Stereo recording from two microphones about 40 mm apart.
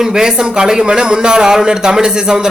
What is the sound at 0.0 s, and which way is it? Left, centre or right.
A man's voice, centre.